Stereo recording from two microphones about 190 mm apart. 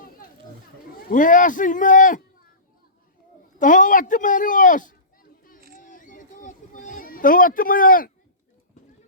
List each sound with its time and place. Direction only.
0.9 s speech: 45° left (ahead or behind)
3.6 s speech: 45° left (ahead or behind)
5.7 s a sound: 45° left (ahead or behind)